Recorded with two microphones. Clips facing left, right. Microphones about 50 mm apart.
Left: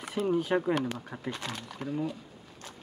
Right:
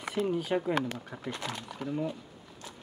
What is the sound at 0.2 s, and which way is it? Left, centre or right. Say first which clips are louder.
Speech: left 1 dB; right.